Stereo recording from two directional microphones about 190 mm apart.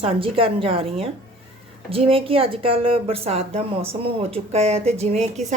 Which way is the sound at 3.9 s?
30° right (ahead or behind).